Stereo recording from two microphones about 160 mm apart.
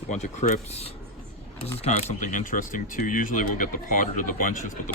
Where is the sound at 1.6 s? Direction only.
40° left (ahead or behind).